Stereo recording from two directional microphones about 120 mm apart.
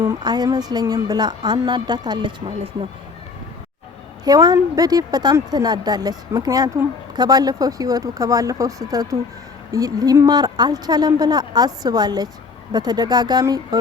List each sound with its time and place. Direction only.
0.0 s speech: 30° right (ahead or behind)
4.2 s speech: 30° right (ahead or behind)